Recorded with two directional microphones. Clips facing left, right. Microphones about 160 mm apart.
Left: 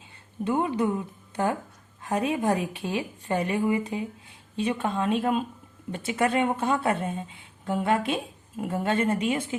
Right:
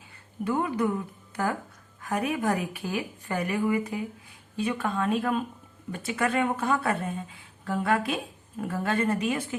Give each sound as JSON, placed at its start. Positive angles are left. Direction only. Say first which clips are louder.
{"t": 0.4, "sound": "a woman's voice", "louder": "left 2 dB", "side_deg": 25}
{"t": 2.0, "sound": "a woman's voice", "louder": "left 2 dB", "side_deg": 25}